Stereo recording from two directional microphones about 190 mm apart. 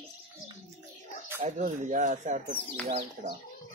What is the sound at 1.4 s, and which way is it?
Speech, 35° right (ahead or behind).